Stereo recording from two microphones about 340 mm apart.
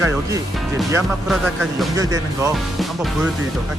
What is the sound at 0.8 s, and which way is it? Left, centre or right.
Speech, centre.